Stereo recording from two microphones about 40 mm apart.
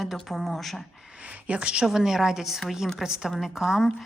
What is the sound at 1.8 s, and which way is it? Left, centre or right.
A woman's voice, centre.